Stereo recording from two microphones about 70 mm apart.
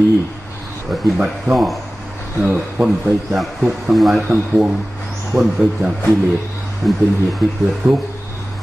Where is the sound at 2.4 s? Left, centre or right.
Centre.